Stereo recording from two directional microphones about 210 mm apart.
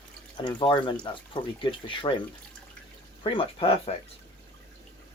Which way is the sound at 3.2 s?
25° left (ahead or behind).